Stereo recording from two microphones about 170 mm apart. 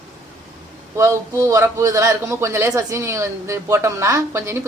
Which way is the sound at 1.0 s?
20° right (ahead or behind).